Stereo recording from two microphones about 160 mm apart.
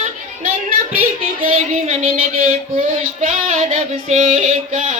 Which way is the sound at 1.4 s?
40° right (ahead or behind).